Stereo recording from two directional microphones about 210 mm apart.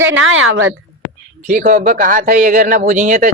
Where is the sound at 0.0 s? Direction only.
70° right (ahead or behind).